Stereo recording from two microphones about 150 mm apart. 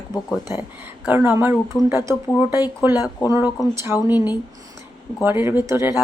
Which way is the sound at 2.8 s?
10° right (ahead or behind).